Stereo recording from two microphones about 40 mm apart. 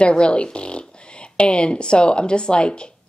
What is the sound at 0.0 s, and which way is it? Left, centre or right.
A woman's voice, left.